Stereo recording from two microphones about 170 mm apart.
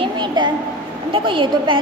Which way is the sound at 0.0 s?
25° right (ahead or behind).